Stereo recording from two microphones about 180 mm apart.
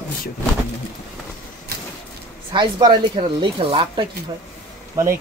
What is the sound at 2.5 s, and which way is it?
Speech, 25° right (ahead or behind).